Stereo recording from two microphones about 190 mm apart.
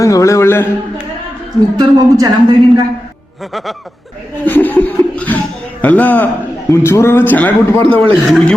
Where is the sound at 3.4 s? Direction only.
Centre (ahead or behind).